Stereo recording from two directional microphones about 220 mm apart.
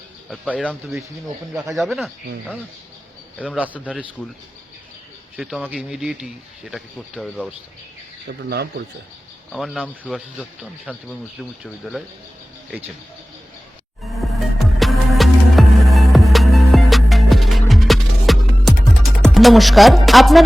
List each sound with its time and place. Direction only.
0.3 s speech: 5° left (ahead or behind)
3.4 s speech: 5° right (ahead or behind)
5.4 s speech: centre (ahead or behind)
8.4 s a man's voice: 50° right (ahead or behind)
9.5 s speech: centre (ahead or behind)
14.1 s music: centre (ahead or behind)
19.2 s speech: centre (ahead or behind)